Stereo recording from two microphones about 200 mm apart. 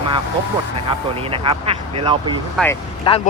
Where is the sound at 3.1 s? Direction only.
25° left (ahead or behind).